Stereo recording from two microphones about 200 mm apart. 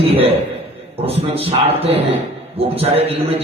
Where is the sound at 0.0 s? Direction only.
30° right (ahead or behind).